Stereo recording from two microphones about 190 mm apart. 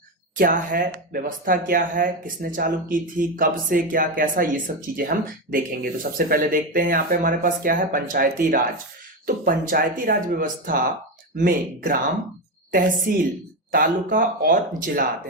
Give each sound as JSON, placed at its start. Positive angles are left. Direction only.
{"t": 0.3, "sound": "speech", "side_deg": -45}
{"t": 13.1, "sound": "speech", "side_deg": -55}